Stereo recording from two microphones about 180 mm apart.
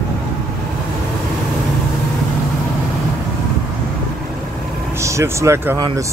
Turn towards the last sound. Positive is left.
turn(degrees=-20)  # may be behind; listen again after turning